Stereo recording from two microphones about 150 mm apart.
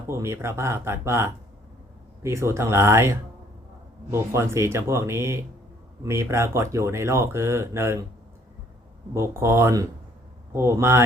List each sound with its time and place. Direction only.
0.1 s speech: 15° right (ahead or behind)
9.1 s speech: 15° right (ahead or behind)